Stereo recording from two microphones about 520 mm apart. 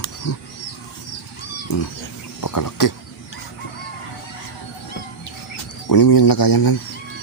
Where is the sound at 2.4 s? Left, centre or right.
Left.